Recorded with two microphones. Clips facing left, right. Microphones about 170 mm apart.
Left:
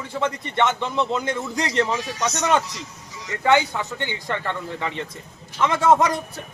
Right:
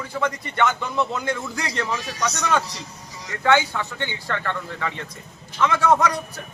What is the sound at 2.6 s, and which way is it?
Music, 35° right (ahead or behind).